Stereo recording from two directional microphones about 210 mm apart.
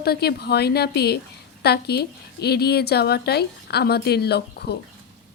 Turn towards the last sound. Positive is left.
turn(degrees=50)  # may be behind; listen again after turning